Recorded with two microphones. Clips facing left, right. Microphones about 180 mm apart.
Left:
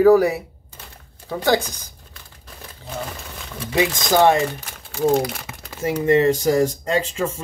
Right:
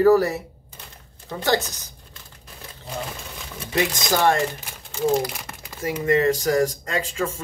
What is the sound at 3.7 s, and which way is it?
Speech, 15° left (ahead or behind).